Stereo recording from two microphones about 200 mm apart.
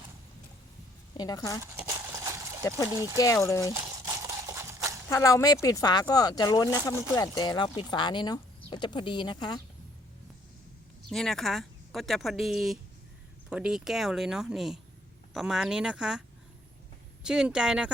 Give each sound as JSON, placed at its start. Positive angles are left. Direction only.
{"t": 1.1, "sound": "speech", "side_deg": 20}
{"t": 1.9, "sound": "horse", "side_deg": -15}
{"t": 2.9, "sound": "speech", "side_deg": -15}
{"t": 3.2, "sound": "speech", "side_deg": 15}
{"t": 3.7, "sound": "a sound", "side_deg": -15}
{"t": 5.0, "sound": "speech", "side_deg": 15}
{"t": 11.1, "sound": "speech", "side_deg": 0}
{"t": 17.2, "sound": "speech", "side_deg": -5}